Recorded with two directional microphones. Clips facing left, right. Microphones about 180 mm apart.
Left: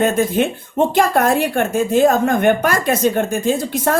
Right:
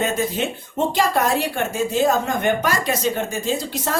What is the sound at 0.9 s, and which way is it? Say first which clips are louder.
A woman's voice: left 4 dB; 55° left (ahead or behind).